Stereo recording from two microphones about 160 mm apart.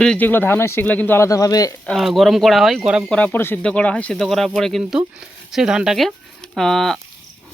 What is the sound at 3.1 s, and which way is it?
Speech, 10° left (ahead or behind).